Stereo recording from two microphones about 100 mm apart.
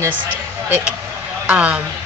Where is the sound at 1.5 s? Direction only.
15° right (ahead or behind).